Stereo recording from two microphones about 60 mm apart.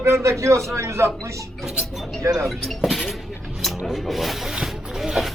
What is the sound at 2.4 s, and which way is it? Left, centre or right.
Speech, centre.